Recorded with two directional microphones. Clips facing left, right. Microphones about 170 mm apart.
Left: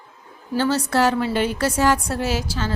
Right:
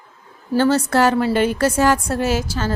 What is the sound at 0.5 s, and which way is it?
A woman's voice, 50° right (ahead or behind).